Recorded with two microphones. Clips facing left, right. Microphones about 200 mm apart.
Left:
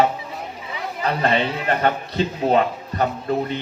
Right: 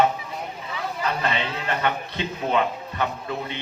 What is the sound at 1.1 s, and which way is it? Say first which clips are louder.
A man's voice: left 7 dB; 35° left (ahead or behind).